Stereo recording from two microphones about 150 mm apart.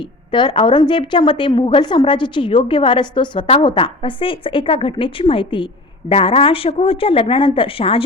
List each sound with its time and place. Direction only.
0.0 s a woman's voice: 30° left (ahead or behind)